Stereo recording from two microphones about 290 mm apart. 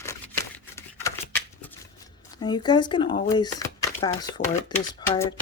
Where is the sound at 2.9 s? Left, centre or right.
Centre.